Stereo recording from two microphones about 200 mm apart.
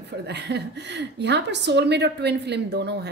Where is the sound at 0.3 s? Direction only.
55° right (ahead or behind).